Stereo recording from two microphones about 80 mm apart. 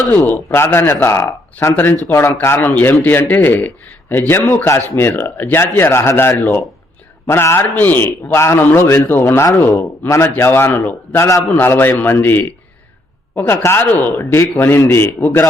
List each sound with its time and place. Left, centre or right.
0.3 s speech: left
1.7 s speech: centre
2.0 s speech: left
2.6 s speech: left
11.2 s speech: left
11.5 s speech: left